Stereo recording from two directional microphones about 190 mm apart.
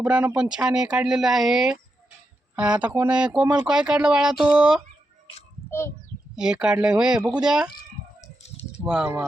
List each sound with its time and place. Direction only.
0.0 s speech: 5° right (ahead or behind)
6.3 s speech: 5° right (ahead or behind)
8.4 s a sound: 35° left (ahead or behind)
8.9 s speech: 5° right (ahead or behind)